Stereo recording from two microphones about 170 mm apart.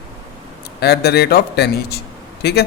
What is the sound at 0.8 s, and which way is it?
A man's voice, 70° left (ahead or behind).